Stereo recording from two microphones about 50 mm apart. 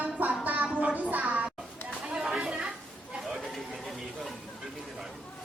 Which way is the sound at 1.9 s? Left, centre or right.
Centre.